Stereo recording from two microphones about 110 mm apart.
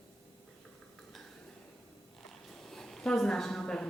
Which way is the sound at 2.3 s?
5° left (ahead or behind).